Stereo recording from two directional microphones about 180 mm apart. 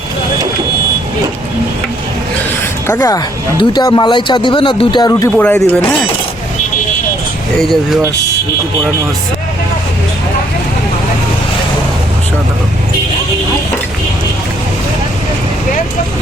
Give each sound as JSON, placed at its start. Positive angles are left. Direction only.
{"t": 2.8, "sound": "speech", "side_deg": 15}
{"t": 5.4, "sound": "speech", "side_deg": 10}